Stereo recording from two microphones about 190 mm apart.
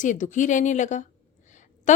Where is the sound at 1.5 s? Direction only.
40° left (ahead or behind).